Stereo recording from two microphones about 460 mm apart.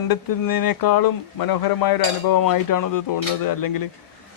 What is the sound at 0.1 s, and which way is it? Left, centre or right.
Speech, left.